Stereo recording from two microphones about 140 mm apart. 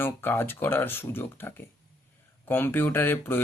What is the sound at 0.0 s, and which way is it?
Speech, 15° left (ahead or behind).